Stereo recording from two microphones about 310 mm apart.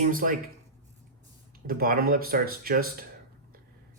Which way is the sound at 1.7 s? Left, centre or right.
Right.